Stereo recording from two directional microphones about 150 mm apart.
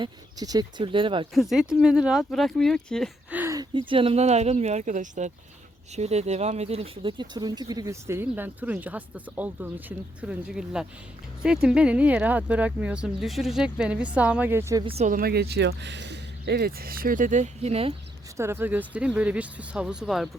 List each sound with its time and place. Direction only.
0.0 s speech: 25° right (ahead or behind)
1.3 s speech: centre (ahead or behind)
3.2 s a sound: 10° right (ahead or behind)
3.5 s speech: 30° right (ahead or behind)
14.8 s speech: 45° right (ahead or behind)
15.1 s speech: 90° right; by 17.9 s 40° right (ahead or behind)
18.3 s speech: 15° right (ahead or behind)